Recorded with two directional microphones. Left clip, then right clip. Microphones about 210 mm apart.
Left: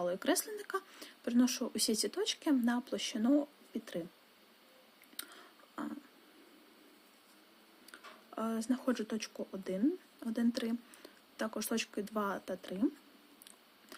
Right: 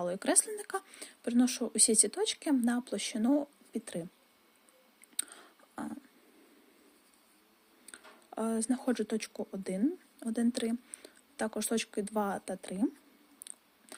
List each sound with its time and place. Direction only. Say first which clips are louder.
0.0 s speech: right 2 dB; 25° right (ahead or behind)
5.1 s a sound: right 5 dB; 25° right (ahead or behind)
7.9 s speech: right 1 dB; 20° right (ahead or behind)